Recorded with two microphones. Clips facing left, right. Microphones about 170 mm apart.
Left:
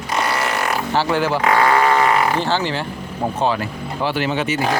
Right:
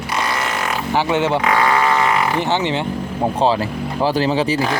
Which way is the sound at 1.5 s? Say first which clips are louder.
Left 1 dB; 35° left (ahead or behind).